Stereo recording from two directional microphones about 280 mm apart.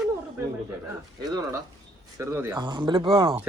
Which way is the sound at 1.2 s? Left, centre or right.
Centre.